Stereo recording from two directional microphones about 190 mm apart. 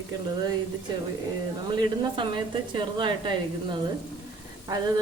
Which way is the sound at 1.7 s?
25° right (ahead or behind).